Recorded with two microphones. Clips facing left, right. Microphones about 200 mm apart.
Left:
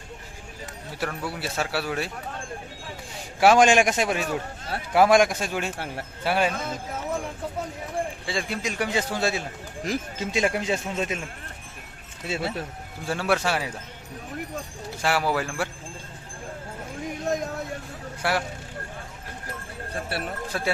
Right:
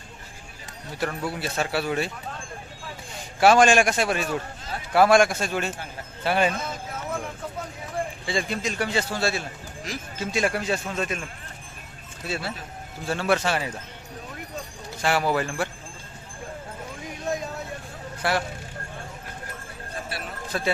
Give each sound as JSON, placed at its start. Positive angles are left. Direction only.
{"t": 0.9, "sound": "speech", "side_deg": 5}
{"t": 3.4, "sound": "a man's voice", "side_deg": 15}
{"t": 8.3, "sound": "speech", "side_deg": 0}
{"t": 8.6, "sound": "a man's voice", "side_deg": 15}
{"t": 12.3, "sound": "a man's voice", "side_deg": 20}
{"t": 13.1, "sound": "a man's voice", "side_deg": 10}
{"t": 15.0, "sound": "speech", "side_deg": 5}
{"t": 18.2, "sound": "speech", "side_deg": 10}
{"t": 20.1, "sound": "a man's voice", "side_deg": 60}
{"t": 20.5, "sound": "a man's voice", "side_deg": 5}